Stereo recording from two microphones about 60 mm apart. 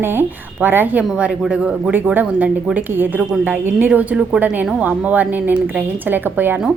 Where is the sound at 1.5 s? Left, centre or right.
Centre.